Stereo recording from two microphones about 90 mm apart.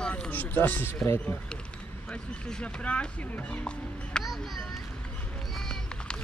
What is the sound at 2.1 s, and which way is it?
Speech, 10° left (ahead or behind).